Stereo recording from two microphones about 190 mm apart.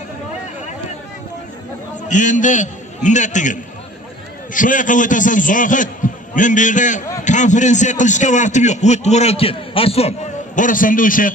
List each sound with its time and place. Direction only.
2.0 s a man's voice: 40° left (ahead or behind)
4.6 s a man's voice: 45° left (ahead or behind)